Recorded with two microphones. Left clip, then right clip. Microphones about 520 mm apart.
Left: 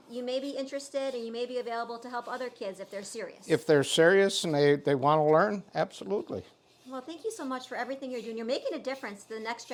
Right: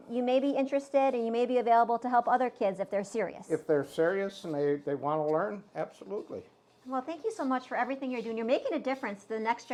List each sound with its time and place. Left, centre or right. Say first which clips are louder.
0.1 s speech: right 6 dB; right
3.5 s speech: left 6 dB; left
6.9 s a woman's voice: right 4 dB; centre